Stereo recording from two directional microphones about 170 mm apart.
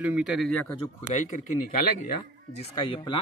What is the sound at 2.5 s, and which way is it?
Speech, 30° left (ahead or behind).